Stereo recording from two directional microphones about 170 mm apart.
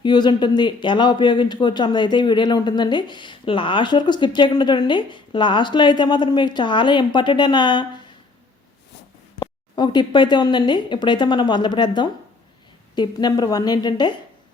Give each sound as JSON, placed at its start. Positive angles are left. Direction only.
{"t": 0.0, "sound": "a man's voice", "side_deg": 25}
{"t": 9.4, "sound": "a man's voice", "side_deg": 25}